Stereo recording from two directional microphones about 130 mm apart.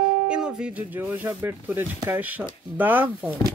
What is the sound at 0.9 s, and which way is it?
Speech, 15° right (ahead or behind).